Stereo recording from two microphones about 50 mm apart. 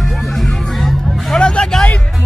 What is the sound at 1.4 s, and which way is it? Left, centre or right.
Music, centre.